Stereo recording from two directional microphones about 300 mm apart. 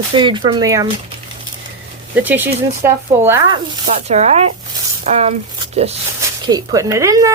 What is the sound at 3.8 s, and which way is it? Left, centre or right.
Speech, right.